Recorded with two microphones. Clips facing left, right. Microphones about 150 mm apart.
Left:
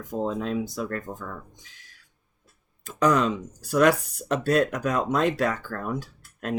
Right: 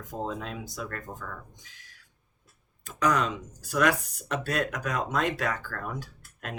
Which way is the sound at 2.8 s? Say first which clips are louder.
Left 5 dB; 30° left (ahead or behind).